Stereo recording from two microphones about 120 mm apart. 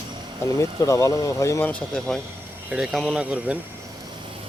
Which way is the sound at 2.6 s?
5° right (ahead or behind).